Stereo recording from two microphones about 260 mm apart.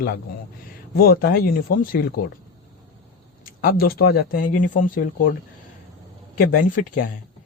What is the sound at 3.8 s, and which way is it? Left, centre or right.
Speech, left.